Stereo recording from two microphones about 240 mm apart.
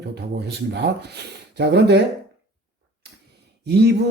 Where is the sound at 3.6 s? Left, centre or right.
Right.